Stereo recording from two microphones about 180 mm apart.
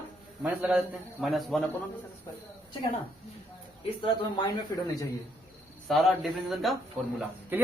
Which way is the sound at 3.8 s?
25° left (ahead or behind).